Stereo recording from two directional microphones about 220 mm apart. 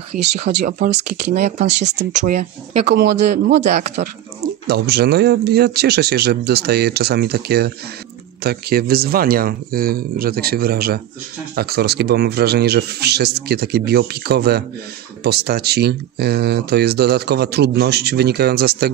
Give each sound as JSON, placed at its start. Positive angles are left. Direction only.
{"t": 0.1, "sound": "speech", "side_deg": -40}
{"t": 2.9, "sound": "speech", "side_deg": -50}
{"t": 3.6, "sound": "speech", "side_deg": -30}
{"t": 4.6, "sound": "speech", "side_deg": -45}